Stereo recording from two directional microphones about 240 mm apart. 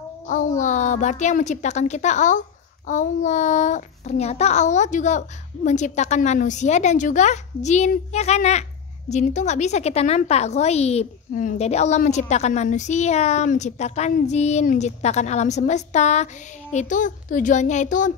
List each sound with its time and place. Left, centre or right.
0.6 s a woman's voice: left